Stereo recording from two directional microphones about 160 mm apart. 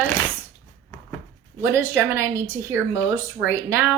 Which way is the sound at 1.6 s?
15° right (ahead or behind).